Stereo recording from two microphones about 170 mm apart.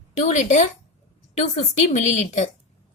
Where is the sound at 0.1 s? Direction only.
45° left (ahead or behind).